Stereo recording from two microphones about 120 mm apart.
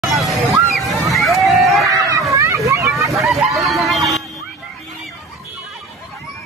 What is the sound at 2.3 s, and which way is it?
Hubbub, 25° right (ahead or behind).